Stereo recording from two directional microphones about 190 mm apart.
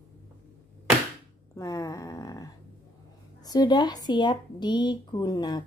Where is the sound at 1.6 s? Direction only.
20° left (ahead or behind).